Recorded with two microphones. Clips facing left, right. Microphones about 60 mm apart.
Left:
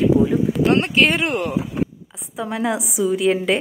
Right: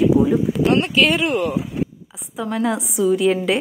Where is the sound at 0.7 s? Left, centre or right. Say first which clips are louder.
Even; left.